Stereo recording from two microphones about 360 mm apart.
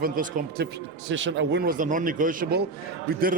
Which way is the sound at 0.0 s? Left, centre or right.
Right.